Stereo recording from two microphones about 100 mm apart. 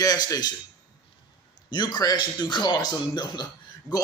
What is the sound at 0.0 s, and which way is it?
Speech, 35° left (ahead or behind).